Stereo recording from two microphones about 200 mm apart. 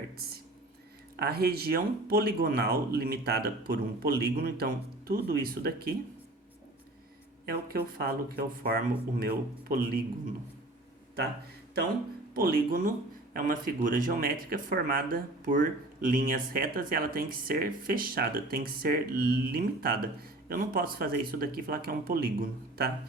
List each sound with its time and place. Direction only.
1.1 s speech: 50° right (ahead or behind)
7.4 s speech: 50° right (ahead or behind)
12.3 s speech: 50° right (ahead or behind)